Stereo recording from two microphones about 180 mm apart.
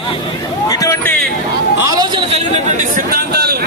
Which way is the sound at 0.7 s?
15° left (ahead or behind).